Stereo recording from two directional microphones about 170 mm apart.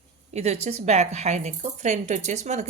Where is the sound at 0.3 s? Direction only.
40° right (ahead or behind).